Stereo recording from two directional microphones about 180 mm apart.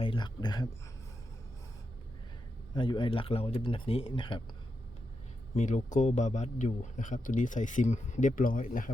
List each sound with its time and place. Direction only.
0.0 s speech: 25° left (ahead or behind)
2.7 s speech: 25° left (ahead or behind)
5.5 s a man's voice: 40° left (ahead or behind)